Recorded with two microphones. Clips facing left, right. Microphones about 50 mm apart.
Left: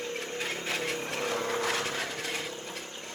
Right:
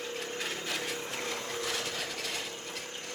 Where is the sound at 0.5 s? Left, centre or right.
Left.